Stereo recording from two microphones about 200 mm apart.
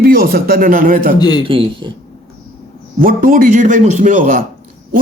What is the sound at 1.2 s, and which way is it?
Speech, 20° left (ahead or behind).